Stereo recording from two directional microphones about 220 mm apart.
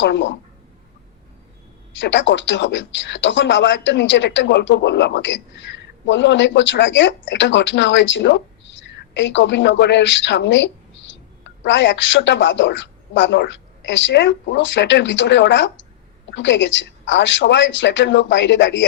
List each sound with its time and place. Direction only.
0.0 s speech: 55° left (ahead or behind)
2.0 s a woman's voice: 55° left (ahead or behind)